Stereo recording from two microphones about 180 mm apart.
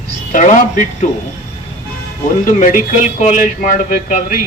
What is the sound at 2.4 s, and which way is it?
Speech, 45° left (ahead or behind).